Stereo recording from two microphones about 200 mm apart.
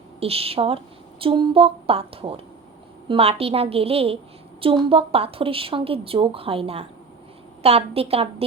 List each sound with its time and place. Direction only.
0.2 s a woman's voice: 30° right (ahead or behind)